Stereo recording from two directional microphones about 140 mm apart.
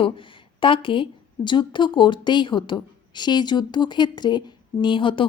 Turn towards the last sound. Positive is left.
turn(degrees=35)  # may be behind; listen again after turning